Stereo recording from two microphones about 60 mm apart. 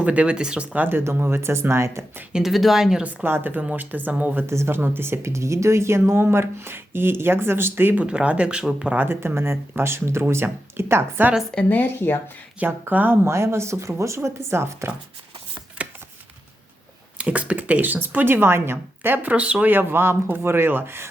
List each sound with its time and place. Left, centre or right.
0.0 s speech: right
0.9 s speech: right
2.3 s speech: centre
3.2 s speech: right
4.4 s speech: right
7.9 s speech: centre
9.0 s speech: right
11.7 s speech: left
12.9 s speech: right
13.2 s speech: right
17.2 s speech: right
19.3 s speech: right
19.6 s speech: right